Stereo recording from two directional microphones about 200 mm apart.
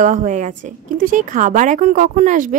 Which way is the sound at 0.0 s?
40° right (ahead or behind).